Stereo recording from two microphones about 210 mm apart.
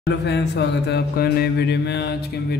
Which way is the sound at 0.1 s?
55° left (ahead or behind).